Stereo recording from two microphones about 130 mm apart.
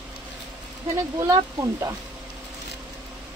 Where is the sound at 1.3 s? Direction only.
25° right (ahead or behind).